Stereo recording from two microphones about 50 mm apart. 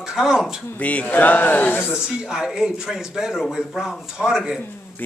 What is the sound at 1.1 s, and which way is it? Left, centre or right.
Speech, left.